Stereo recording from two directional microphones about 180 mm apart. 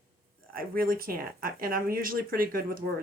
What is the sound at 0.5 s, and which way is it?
Speech, 55° right (ahead or behind).